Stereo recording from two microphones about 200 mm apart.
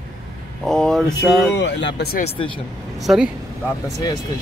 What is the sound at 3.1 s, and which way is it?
Speech, centre (ahead or behind).